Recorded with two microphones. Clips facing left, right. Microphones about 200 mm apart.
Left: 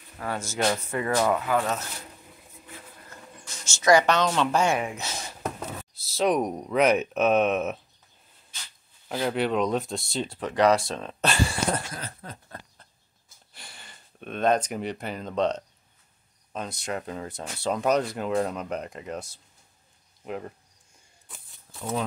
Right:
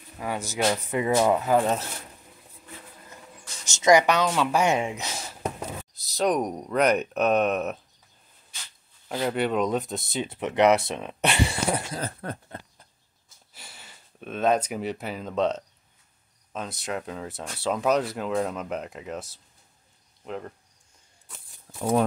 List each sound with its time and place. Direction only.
0.2 s a woman's voice: 15° right (ahead or behind)
1.4 s speech: 35° right (ahead or behind)
3.6 s a woman's voice: 20° right (ahead or behind)
4.6 s speech: 20° right (ahead or behind)
5.4 s a sound: 10° right (ahead or behind)
6.0 s speech: centre (ahead or behind)
9.1 s speech: centre (ahead or behind)
10.3 s speech: 20° right (ahead or behind)
12.2 s a sound: 65° right (ahead or behind)
13.5 s speech: 5° right (ahead or behind)
20.2 s speech: 5° left (ahead or behind)